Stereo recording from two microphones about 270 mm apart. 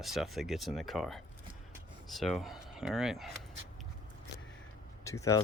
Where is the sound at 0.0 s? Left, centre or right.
Centre.